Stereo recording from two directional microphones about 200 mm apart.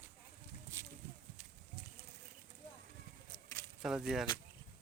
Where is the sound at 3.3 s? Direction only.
20° left (ahead or behind).